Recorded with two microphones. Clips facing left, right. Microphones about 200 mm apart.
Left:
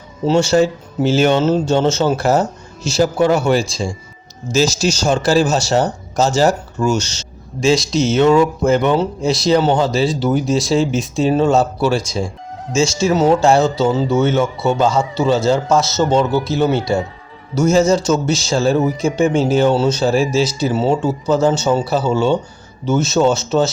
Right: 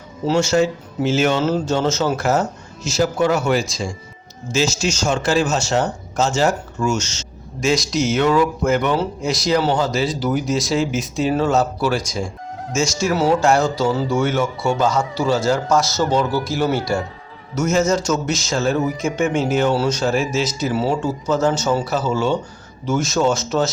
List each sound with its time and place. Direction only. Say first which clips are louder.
0.3 s speech: left 3 dB; 30° left (ahead or behind)